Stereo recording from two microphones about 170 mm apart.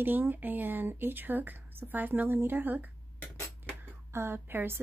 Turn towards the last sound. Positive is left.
turn(degrees=-15)  # may be behind; listen again after turning